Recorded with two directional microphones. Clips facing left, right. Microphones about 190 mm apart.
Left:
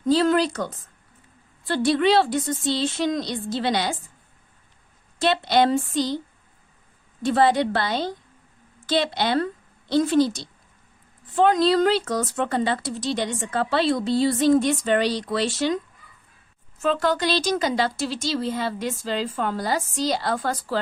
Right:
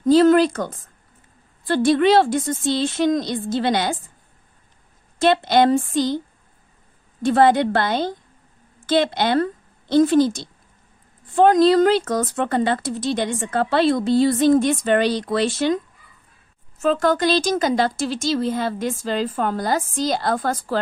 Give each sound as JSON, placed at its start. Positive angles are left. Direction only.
{"t": 0.0, "sound": "speech", "side_deg": -45}
{"t": 5.2, "sound": "speech", "side_deg": -50}
{"t": 7.2, "sound": "speech", "side_deg": -50}
{"t": 16.8, "sound": "speech", "side_deg": -45}